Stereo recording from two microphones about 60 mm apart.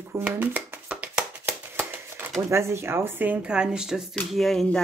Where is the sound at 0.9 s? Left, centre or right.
Right.